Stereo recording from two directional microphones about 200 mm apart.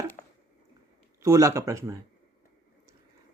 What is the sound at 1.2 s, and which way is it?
Speech, 15° right (ahead or behind).